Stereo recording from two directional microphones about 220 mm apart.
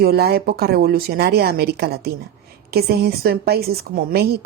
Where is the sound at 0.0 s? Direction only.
45° right (ahead or behind).